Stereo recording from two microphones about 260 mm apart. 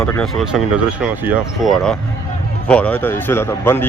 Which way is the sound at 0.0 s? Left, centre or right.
Centre.